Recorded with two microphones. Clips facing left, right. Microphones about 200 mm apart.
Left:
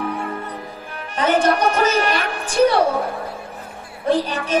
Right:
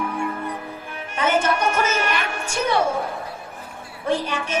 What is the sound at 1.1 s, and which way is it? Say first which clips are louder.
A woman's voice: left 4 dB; 35° left (ahead or behind).